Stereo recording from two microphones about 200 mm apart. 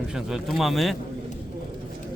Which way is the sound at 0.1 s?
Centre (ahead or behind).